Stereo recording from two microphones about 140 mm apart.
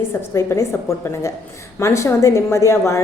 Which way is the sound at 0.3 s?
20° left (ahead or behind).